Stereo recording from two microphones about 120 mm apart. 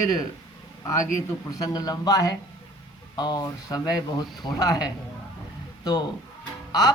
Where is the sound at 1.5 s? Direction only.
30° left (ahead or behind).